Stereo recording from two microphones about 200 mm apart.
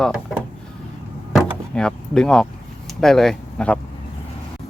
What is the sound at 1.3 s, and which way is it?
Door, centre (ahead or behind).